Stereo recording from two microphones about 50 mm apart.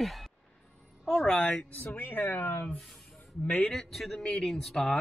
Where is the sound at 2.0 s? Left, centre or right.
Left.